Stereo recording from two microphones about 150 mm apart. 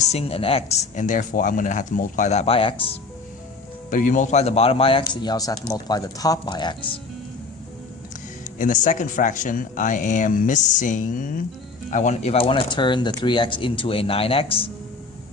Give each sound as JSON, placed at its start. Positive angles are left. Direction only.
{"t": 0.1, "sound": "speech", "side_deg": 40}
{"t": 3.8, "sound": "speech", "side_deg": 60}
{"t": 8.5, "sound": "speech", "side_deg": 60}